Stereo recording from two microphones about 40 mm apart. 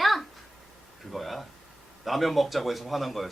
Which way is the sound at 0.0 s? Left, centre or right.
Centre.